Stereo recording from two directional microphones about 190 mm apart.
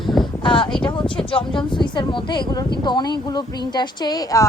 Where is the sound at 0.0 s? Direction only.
Centre (ahead or behind).